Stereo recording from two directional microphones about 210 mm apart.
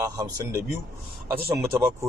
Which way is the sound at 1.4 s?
15° right (ahead or behind).